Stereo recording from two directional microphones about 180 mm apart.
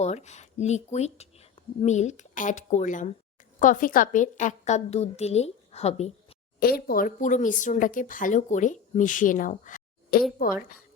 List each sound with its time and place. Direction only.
0.0 s a woman's voice: 40° left (ahead or behind)
6.6 s speech: 60° left (ahead or behind)